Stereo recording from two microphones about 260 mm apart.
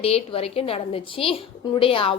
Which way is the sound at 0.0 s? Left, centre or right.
Left.